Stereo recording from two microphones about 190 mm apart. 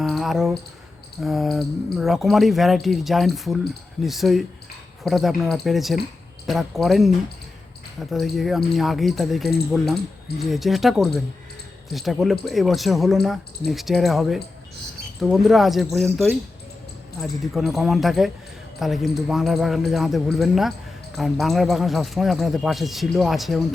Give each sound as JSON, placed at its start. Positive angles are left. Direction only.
{"t": 0.0, "sound": "a sound", "side_deg": 0}
{"t": 1.2, "sound": "speech", "side_deg": 0}
{"t": 8.1, "sound": "speech", "side_deg": 0}